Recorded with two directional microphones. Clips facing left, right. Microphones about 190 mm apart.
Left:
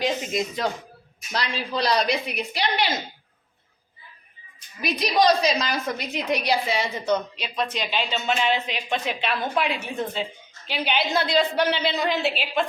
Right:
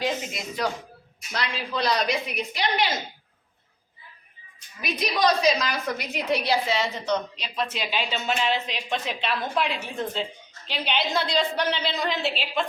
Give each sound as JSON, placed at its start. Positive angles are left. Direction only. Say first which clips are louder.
{"t": 0.0, "sound": "speech", "louder": "left 4 dB", "side_deg": 20}
{"t": 1.3, "sound": "a woman's voice", "louder": "left 2 dB", "side_deg": 35}
{"t": 4.9, "sound": "a woman's voice", "louder": "left 3 dB", "side_deg": 30}
{"t": 6.1, "sound": "a woman's voice", "louder": "even", "side_deg": 15}